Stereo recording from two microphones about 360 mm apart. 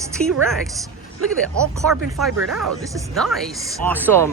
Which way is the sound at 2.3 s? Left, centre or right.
Right.